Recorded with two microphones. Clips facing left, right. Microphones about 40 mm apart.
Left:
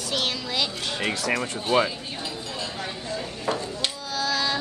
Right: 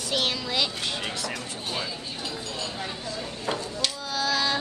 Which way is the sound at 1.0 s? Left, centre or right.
Left.